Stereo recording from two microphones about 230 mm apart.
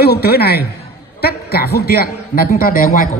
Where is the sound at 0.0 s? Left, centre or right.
Left.